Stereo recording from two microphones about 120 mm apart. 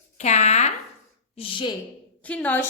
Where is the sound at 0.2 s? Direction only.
75° left (ahead or behind).